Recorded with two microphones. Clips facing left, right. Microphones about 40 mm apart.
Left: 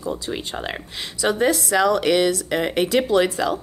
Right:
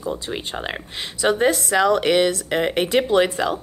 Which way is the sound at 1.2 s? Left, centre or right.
Right.